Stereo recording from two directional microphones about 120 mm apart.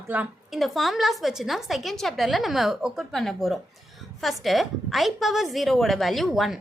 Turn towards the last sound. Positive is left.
turn(degrees=0)  # may be behind; listen again after turning